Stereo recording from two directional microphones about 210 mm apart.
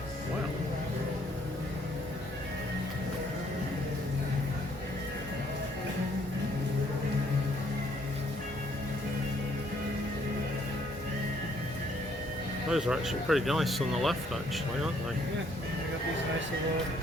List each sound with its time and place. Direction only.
12.7 s speech: 5° right (ahead or behind)